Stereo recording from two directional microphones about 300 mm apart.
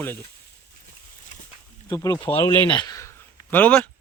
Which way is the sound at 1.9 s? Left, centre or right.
Centre.